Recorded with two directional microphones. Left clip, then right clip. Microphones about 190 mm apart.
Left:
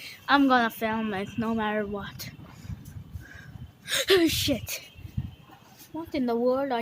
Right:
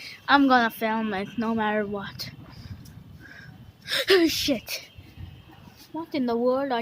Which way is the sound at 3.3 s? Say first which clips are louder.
Right 1 dB; centre (ahead or behind).